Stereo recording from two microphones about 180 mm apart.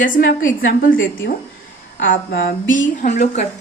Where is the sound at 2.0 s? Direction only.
90° left.